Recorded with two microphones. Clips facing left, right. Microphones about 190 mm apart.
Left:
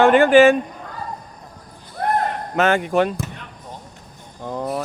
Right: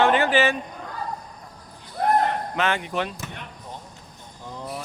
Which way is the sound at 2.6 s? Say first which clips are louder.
Left 11 dB; 45° left (ahead or behind).